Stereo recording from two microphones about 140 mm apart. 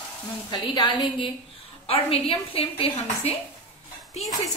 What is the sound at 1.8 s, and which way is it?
A woman's voice, 45° left (ahead or behind).